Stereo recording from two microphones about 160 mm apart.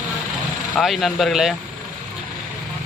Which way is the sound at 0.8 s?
Centre (ahead or behind).